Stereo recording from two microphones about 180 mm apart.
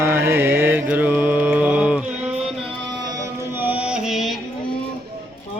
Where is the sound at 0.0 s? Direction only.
15° right (ahead or behind).